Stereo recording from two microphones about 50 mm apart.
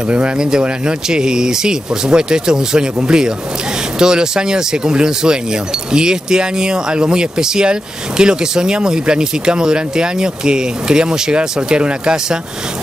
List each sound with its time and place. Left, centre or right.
0.1 s speech: centre